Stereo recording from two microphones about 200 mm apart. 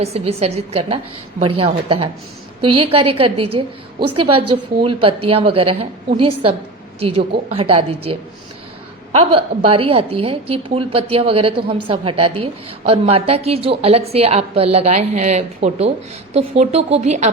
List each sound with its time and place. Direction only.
0.0 s a woman's voice: 30° right (ahead or behind)
9.1 s a woman's voice: 30° right (ahead or behind)